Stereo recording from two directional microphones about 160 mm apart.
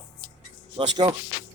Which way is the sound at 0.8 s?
30° right (ahead or behind).